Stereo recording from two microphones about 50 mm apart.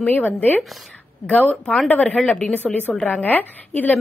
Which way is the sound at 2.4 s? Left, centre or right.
Left.